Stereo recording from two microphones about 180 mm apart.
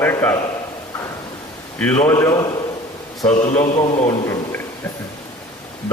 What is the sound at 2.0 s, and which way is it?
A man's voice, 15° left (ahead or behind).